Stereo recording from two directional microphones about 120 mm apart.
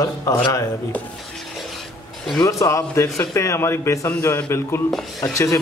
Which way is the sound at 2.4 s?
25° left (ahead or behind).